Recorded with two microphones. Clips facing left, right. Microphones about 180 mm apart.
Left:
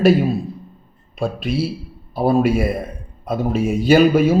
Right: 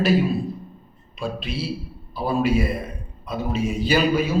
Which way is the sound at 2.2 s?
55° left (ahead or behind).